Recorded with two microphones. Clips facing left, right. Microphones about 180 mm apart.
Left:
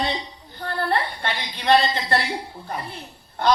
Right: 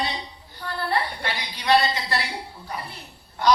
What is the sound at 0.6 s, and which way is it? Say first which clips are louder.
A man's voice: left 2 dB; 55° left (ahead or behind).